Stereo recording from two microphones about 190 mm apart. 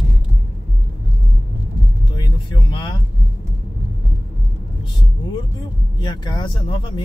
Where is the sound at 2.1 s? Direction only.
25° left (ahead or behind).